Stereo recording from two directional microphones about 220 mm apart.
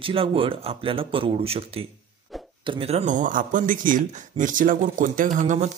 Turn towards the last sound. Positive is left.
turn(degrees=-35)  # may be behind; listen again after turning